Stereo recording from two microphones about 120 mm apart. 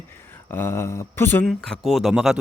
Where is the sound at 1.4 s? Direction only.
5° left (ahead or behind).